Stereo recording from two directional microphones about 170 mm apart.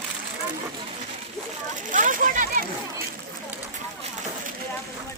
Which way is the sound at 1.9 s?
50° right (ahead or behind).